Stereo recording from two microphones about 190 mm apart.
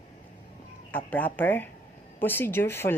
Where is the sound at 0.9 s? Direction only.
10° left (ahead or behind).